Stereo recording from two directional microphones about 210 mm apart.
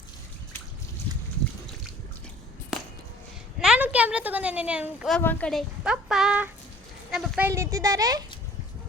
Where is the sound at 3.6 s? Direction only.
5° right (ahead or behind).